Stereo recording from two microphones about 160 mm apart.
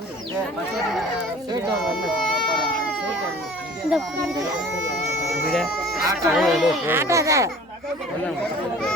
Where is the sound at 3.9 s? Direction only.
Centre (ahead or behind).